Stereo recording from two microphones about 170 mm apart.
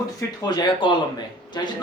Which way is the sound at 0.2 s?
25° left (ahead or behind).